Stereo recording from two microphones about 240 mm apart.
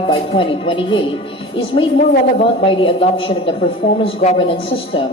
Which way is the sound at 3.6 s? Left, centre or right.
Left.